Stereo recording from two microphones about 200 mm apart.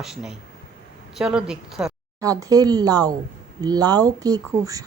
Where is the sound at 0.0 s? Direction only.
Centre (ahead or behind).